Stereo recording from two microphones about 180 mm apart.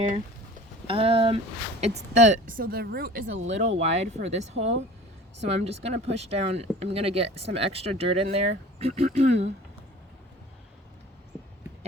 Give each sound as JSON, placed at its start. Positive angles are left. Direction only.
{"t": 0.9, "sound": "speech", "side_deg": -30}
{"t": 3.4, "sound": "speech", "side_deg": -40}
{"t": 11.3, "sound": "a sound", "side_deg": 5}